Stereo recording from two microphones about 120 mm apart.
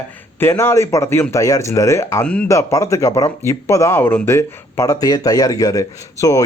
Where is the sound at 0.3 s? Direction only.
20° left (ahead or behind).